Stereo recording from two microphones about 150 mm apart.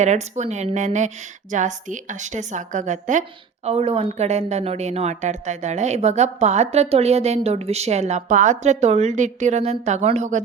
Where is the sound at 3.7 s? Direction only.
40° right (ahead or behind).